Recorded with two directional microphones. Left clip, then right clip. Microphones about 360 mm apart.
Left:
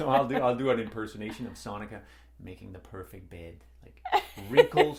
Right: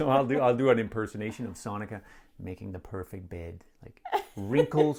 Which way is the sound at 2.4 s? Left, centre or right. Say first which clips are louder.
Right 6 dB; right.